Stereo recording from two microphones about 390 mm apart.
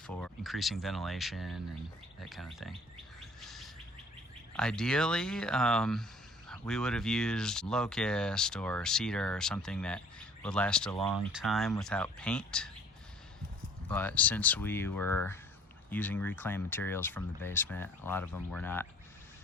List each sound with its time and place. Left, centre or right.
0.1 s speech: centre
3.4 s bird: centre
4.5 s speech: centre
13.8 s speech: centre